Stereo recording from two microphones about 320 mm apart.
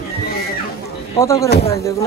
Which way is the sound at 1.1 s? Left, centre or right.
Centre.